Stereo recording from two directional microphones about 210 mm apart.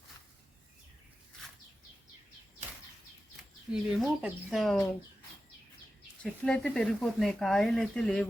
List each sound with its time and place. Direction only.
3.7 s speech: 5° right (ahead or behind)
6.4 s speech: 5° left (ahead or behind)